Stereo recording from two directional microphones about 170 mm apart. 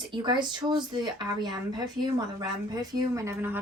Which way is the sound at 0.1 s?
25° right (ahead or behind).